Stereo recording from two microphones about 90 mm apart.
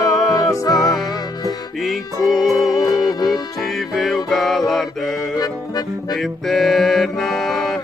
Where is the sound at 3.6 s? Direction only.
Centre (ahead or behind).